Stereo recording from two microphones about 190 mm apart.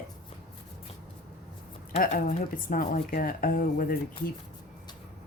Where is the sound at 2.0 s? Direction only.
50° left (ahead or behind).